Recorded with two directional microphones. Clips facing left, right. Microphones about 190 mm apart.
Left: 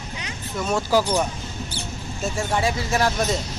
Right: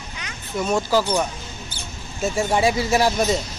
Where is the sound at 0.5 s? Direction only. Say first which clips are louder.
Right 3 dB; 5° right (ahead or behind).